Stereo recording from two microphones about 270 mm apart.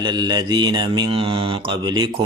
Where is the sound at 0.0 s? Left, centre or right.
Centre.